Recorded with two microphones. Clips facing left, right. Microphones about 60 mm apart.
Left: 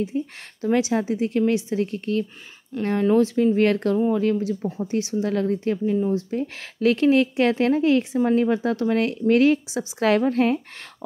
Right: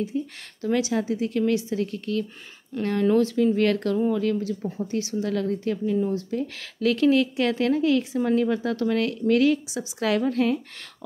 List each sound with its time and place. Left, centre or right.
0.0 s a woman's voice: left